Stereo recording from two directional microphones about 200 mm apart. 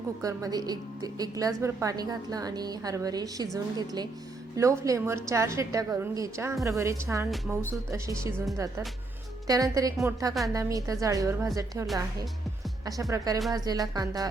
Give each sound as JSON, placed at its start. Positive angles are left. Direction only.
{"t": 0.2, "sound": "a woman's voice", "side_deg": -20}
{"t": 9.5, "sound": "a woman's voice", "side_deg": -15}
{"t": 12.8, "sound": "a woman's voice", "side_deg": -15}